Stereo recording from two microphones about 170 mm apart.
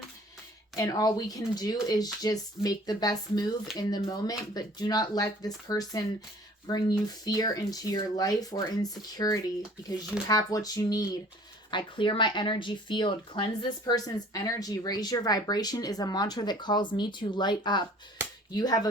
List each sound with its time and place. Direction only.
0.8 s speech: 20° left (ahead or behind)